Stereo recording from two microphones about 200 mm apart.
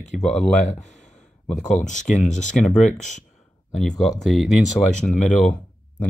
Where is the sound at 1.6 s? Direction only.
40° left (ahead or behind).